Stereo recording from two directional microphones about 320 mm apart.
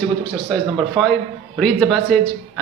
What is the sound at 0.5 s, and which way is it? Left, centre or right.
A man's voice, centre.